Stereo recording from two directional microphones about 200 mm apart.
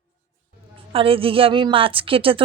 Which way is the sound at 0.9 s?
30° right (ahead or behind).